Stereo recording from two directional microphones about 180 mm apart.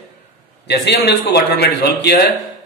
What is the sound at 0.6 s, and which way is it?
A man's voice, 70° left (ahead or behind).